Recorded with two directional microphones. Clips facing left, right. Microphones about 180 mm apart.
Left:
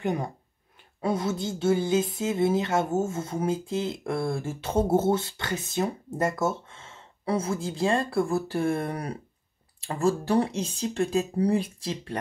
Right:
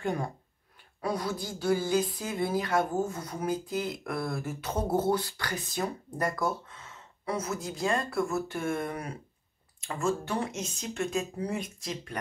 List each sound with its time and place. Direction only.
0.0 s speech: 20° left (ahead or behind)